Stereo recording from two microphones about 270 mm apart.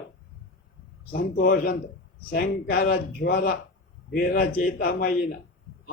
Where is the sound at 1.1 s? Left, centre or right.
Left.